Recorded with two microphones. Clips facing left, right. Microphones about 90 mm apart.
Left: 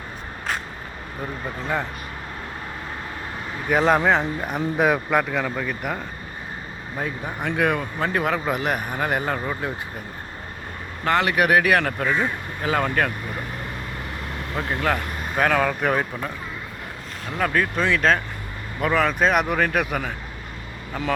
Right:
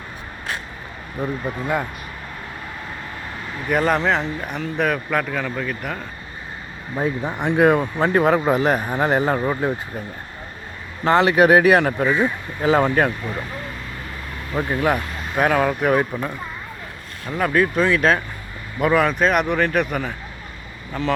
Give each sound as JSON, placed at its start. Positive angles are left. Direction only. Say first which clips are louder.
{"t": 1.6, "sound": "speech", "louder": "right 2 dB", "side_deg": -10}
{"t": 3.7, "sound": "speech", "louder": "left 1 dB", "side_deg": 0}
{"t": 6.9, "sound": "speech", "louder": "right 6 dB", "side_deg": -25}
{"t": 11.0, "sound": "speech", "louder": "right 5 dB", "side_deg": -30}
{"t": 14.5, "sound": "speech", "louder": "right 4 dB", "side_deg": -15}
{"t": 17.3, "sound": "speech", "louder": "right 4 dB", "side_deg": -5}